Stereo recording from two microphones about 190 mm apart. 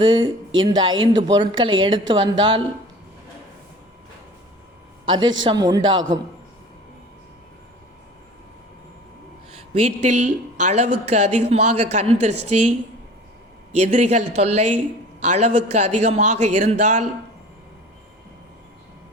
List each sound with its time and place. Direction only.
0.0 s speech: 25° right (ahead or behind)
5.0 s a man's voice: 25° right (ahead or behind)
9.7 s a woman's voice: 35° right (ahead or behind)
13.7 s a woman's voice: 35° right (ahead or behind)